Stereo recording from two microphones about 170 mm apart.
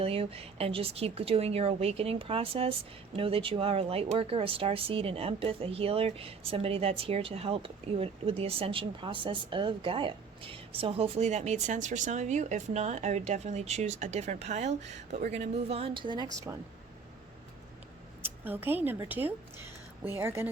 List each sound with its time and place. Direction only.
0.0 s speech: 35° right (ahead or behind)
18.2 s a woman's voice: 10° right (ahead or behind)